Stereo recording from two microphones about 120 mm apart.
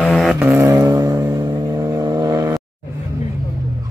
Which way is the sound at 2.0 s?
35° right (ahead or behind).